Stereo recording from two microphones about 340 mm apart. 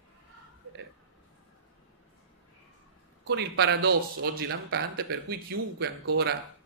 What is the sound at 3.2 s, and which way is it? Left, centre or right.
Speech, right.